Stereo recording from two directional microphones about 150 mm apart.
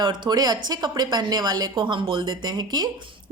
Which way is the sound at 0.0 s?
30° right (ahead or behind).